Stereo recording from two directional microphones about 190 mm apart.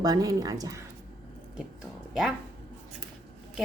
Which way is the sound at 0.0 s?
20° right (ahead or behind).